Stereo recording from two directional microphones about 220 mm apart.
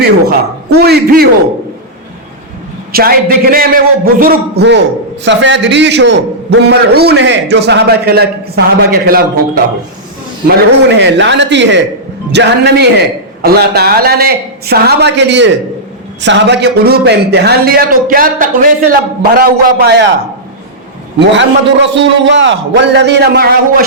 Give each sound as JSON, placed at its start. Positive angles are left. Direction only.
{"t": 0.0, "sound": "speech", "side_deg": -45}
{"t": 2.9, "sound": "speech", "side_deg": -40}
{"t": 10.8, "sound": "speech", "side_deg": -50}
{"t": 21.2, "sound": "speech", "side_deg": -55}